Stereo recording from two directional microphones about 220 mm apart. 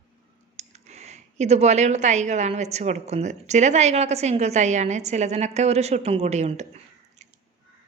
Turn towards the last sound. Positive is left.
turn(degrees=-30)  # may be behind; listen again after turning